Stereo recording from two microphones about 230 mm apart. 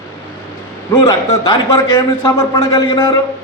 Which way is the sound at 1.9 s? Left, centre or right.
Centre.